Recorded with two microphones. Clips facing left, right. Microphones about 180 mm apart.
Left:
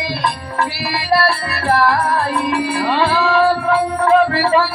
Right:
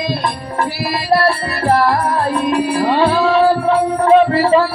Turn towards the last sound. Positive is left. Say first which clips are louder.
# right 3 dB
turn(degrees=-25)  # may be behind; listen again after turning